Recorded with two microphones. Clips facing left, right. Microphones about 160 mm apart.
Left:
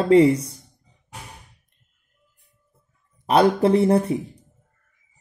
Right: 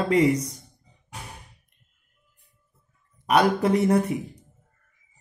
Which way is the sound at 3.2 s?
30° left (ahead or behind).